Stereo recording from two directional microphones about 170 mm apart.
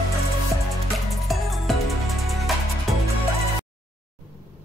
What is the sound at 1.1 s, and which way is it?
Music, centre (ahead or behind).